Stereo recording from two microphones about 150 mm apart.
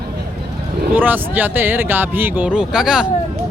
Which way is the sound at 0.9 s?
10° right (ahead or behind).